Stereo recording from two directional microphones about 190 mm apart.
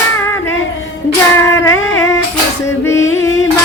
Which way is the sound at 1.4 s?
15° left (ahead or behind).